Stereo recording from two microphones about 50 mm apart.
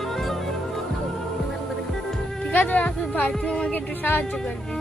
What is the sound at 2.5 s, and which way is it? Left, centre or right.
Speech, left.